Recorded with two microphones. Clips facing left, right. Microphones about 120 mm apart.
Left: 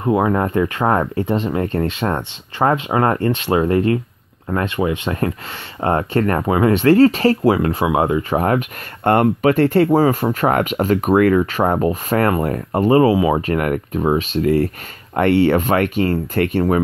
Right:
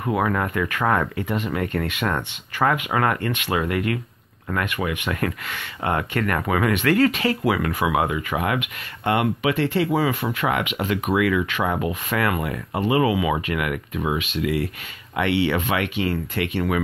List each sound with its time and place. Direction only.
0.0 s speech: 25° left (ahead or behind); by 16.8 s 40° left (ahead or behind)